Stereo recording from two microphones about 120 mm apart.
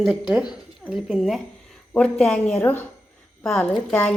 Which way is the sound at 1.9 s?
5° left (ahead or behind).